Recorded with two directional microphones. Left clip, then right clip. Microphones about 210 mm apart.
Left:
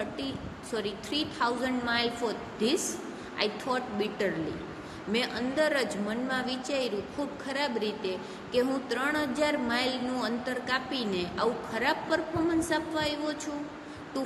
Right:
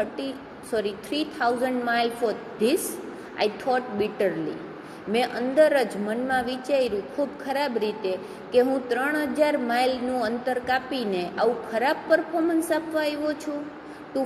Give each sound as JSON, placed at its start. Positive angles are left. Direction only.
{"t": 0.7, "sound": "a woman's voice", "side_deg": -5}